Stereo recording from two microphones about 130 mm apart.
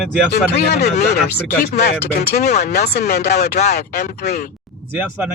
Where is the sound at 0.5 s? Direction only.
60° left (ahead or behind).